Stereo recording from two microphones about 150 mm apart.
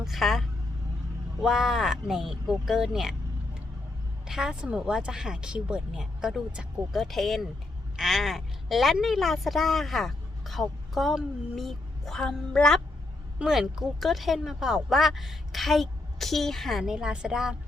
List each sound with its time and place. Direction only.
0.0 s a woman's voice: centre (ahead or behind)
4.3 s a woman's voice: 5° right (ahead or behind)